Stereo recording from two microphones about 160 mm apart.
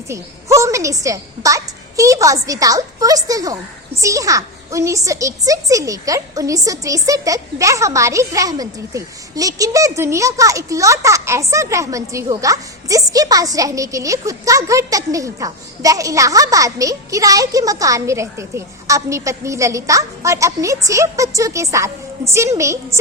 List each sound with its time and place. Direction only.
0.1 s a child's voice: 20° right (ahead or behind)